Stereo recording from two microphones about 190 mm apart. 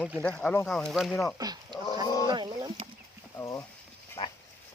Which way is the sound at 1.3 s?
20° right (ahead or behind).